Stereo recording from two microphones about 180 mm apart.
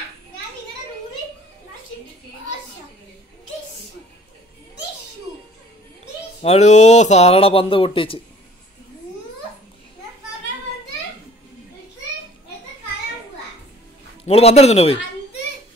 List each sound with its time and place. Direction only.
6.4 s speech: 40° left (ahead or behind)
14.2 s speech: 35° left (ahead or behind)